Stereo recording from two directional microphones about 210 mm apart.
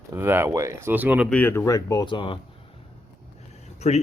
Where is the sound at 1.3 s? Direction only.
10° left (ahead or behind); by 2.4 s 25° left (ahead or behind).